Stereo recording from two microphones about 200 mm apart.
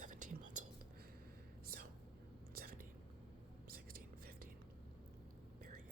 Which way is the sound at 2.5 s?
45° right (ahead or behind).